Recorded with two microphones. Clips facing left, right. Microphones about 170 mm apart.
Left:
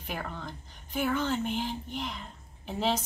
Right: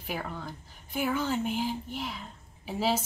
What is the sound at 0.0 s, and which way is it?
Speech, 5° right (ahead or behind).